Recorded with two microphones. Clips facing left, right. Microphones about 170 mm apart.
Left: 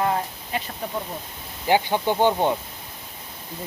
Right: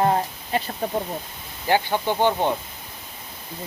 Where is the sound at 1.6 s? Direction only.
15° left (ahead or behind).